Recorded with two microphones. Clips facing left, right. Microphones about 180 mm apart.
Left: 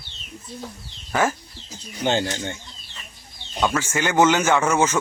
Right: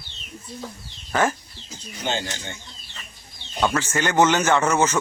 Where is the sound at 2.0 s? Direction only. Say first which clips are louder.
Left 6 dB; 50° left (ahead or behind).